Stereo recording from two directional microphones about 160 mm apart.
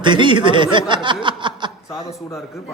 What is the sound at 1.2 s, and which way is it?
Snicker, 30° right (ahead or behind).